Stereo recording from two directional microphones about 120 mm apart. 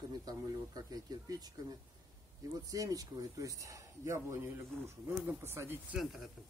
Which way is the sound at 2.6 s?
30° right (ahead or behind).